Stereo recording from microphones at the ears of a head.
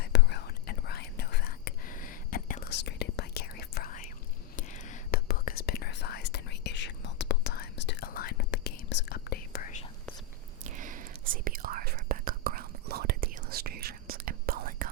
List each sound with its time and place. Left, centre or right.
0.0 s whispering: left
10.6 s whispering: right